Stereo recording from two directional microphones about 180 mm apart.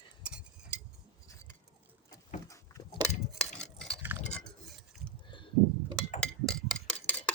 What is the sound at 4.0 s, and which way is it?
Chink, 10° right (ahead or behind).